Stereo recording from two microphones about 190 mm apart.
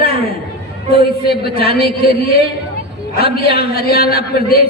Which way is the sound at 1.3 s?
55° left (ahead or behind).